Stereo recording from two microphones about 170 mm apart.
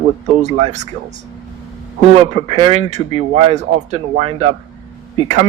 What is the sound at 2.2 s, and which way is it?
Speech, 35° right (ahead or behind).